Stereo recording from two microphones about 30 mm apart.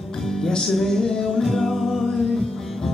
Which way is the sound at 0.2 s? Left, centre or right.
Centre.